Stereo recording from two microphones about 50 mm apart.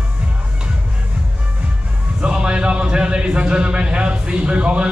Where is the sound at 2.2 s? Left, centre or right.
Centre.